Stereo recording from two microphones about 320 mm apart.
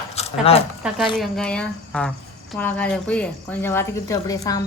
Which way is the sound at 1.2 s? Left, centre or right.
Centre.